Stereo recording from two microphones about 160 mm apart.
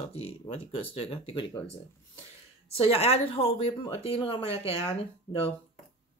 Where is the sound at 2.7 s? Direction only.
35° left (ahead or behind).